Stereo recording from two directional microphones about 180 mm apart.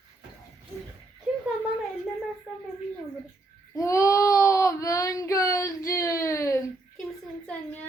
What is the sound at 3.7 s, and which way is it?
Child singing, 15° left (ahead or behind).